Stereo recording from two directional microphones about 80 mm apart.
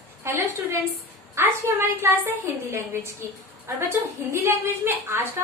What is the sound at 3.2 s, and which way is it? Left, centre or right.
A woman's voice, right.